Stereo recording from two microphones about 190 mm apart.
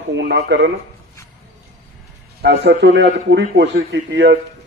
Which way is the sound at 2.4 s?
60° right (ahead or behind).